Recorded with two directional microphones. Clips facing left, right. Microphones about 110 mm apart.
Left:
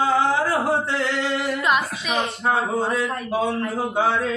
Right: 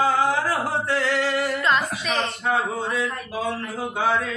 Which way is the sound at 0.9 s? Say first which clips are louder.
Right 1 dB; 20° left (ahead or behind).